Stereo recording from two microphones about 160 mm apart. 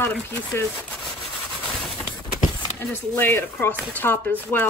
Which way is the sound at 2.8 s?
15° left (ahead or behind).